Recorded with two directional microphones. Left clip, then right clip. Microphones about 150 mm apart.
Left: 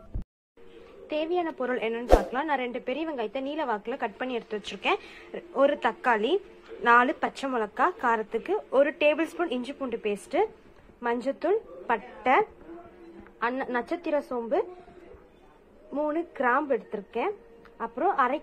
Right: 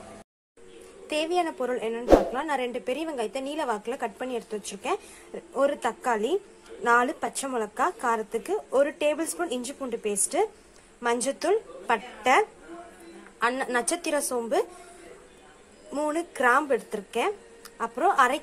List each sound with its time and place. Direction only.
1.0 s a woman's voice: 15° right (ahead or behind)
1.7 s speech: 5° right (ahead or behind)
2.4 s a woman's voice: 15° right (ahead or behind)
15.9 s a woman's voice: 15° right (ahead or behind)